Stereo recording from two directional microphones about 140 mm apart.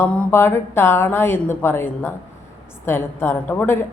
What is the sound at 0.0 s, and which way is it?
A woman's voice, 15° left (ahead or behind).